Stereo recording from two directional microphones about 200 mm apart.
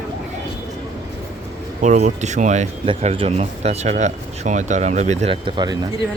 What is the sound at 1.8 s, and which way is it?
Speech, 35° right (ahead or behind).